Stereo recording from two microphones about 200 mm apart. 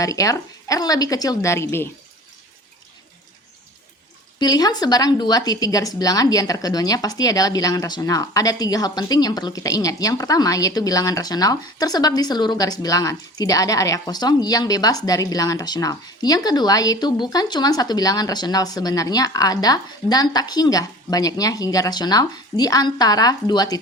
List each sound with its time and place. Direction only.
0.0 s speech: 15° left (ahead or behind)
4.4 s speech: 20° left (ahead or behind)